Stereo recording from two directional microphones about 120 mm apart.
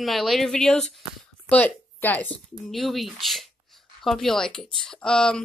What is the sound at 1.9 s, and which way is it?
Speech, 15° left (ahead or behind).